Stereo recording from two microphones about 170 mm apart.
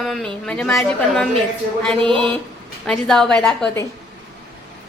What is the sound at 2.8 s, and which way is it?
Speech, 5° left (ahead or behind).